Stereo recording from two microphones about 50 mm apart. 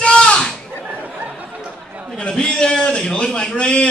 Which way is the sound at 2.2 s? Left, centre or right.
Centre.